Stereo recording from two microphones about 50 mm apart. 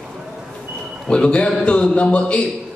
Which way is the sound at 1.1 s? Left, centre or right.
Left.